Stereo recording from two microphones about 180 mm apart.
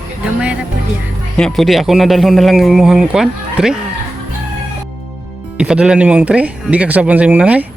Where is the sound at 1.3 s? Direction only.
5° left (ahead or behind).